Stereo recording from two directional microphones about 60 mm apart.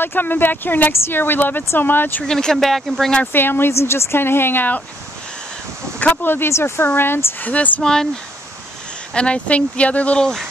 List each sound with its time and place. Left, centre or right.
0.0 s speech: left
2.2 s speech: centre
3.3 s speech: left
5.9 s speech: left
7.4 s speech: left
7.8 s speech: centre
9.1 s speech: centre
10.2 s speech: centre